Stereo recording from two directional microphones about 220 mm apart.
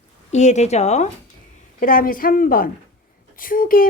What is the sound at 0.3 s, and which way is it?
A woman's voice, 30° left (ahead or behind).